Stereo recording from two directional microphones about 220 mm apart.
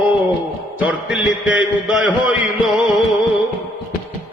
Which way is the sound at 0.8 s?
5° right (ahead or behind).